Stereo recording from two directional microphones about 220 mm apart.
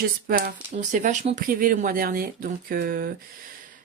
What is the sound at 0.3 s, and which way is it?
Speech, 40° right (ahead or behind).